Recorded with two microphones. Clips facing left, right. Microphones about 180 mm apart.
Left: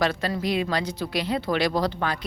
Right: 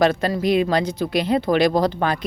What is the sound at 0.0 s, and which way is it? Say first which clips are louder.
Speech: right 6 dB; 50° right (ahead or behind).